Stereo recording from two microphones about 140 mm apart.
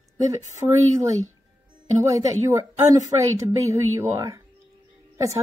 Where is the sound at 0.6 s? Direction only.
20° right (ahead or behind).